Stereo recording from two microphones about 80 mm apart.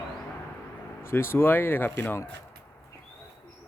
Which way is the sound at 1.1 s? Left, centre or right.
Left.